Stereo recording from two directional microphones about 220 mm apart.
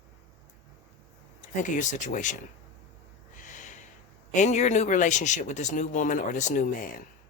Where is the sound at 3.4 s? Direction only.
35° left (ahead or behind).